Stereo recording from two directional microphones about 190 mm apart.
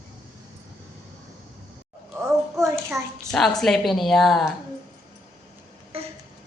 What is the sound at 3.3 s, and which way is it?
A woman's voice, centre (ahead or behind).